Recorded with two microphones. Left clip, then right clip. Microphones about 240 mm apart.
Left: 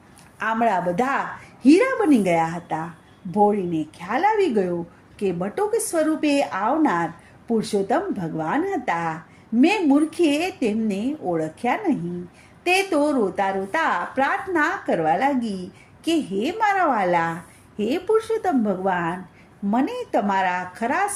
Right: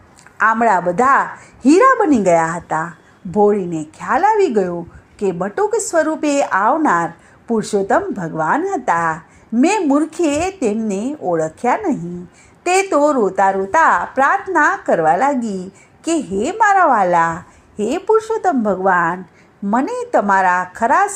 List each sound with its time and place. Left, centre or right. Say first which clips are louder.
0.3 s a man's voice: right 8 dB; centre
4.0 s a woman's voice: right 7 dB; right
19.7 s speech: right 7 dB; centre